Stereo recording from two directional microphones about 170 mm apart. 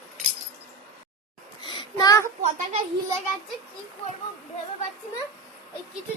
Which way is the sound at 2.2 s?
40° right (ahead or behind).